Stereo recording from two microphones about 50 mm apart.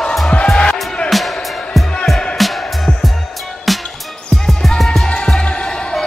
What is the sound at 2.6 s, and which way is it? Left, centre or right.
Music, centre.